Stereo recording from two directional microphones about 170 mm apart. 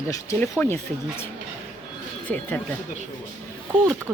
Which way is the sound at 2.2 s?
10° left (ahead or behind).